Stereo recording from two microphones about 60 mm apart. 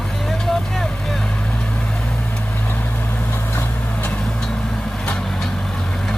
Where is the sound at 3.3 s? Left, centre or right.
Left.